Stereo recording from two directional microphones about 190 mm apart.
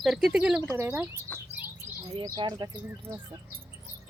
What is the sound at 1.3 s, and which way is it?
Bird, 5° left (ahead or behind).